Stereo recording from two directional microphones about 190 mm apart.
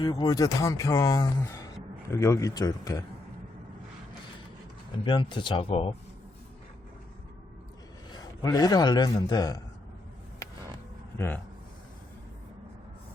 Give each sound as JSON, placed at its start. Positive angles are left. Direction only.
{"t": 0.0, "sound": "speech", "side_deg": 20}
{"t": 5.0, "sound": "speech", "side_deg": 25}
{"t": 8.1, "sound": "a man's voice", "side_deg": 20}